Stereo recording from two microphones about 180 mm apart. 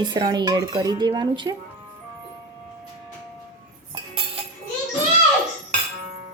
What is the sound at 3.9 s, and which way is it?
Music, 30° right (ahead or behind).